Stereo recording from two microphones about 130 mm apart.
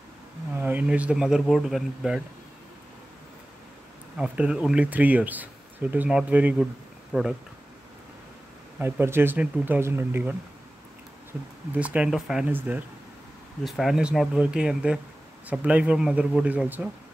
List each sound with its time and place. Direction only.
0.6 s speech: 10° right (ahead or behind)
4.2 s speech: 5° right (ahead or behind)
8.7 s speech: 15° right (ahead or behind)
11.3 s speech: 10° right (ahead or behind)
13.7 s speech: centre (ahead or behind)